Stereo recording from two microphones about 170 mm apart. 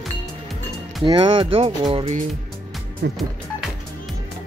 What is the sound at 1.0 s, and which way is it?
Speech, 30° right (ahead or behind).